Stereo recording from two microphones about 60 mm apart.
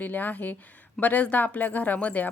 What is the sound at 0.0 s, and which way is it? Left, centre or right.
Speech, left.